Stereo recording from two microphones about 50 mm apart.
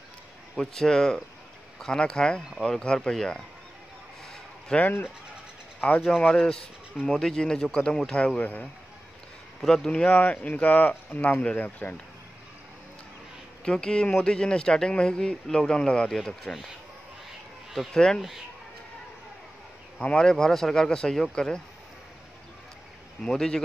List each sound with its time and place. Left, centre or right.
0.6 s speech: centre
4.7 s speech: centre
5.8 s speech: left
6.0 s speech: centre
8.4 s speech: left
9.6 s speech: centre
9.8 s a man's voice: left
13.7 s a man's voice: centre
17.9 s speech: centre
20.0 s speech: left
23.2 s speech: centre